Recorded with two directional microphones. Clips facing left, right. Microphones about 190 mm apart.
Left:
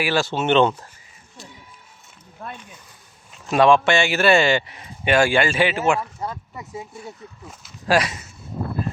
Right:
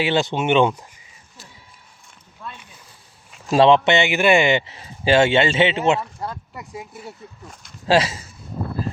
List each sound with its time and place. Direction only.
0.0 s speech: 20° right (ahead or behind)
3.5 s a man's voice: 25° right (ahead or behind)
6.0 s speech: centre (ahead or behind)
7.9 s a man's voice: 25° right (ahead or behind)